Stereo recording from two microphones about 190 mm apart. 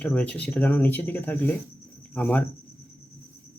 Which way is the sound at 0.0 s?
5° left (ahead or behind).